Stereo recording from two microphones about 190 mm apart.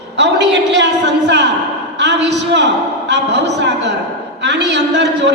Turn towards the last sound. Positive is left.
turn(degrees=-65)  # may be behind; listen again after turning